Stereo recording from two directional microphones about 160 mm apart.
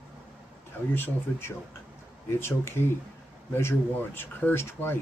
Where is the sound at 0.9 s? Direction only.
15° left (ahead or behind).